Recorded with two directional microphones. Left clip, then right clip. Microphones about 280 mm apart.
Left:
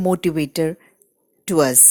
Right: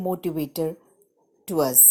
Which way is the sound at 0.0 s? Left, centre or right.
Left.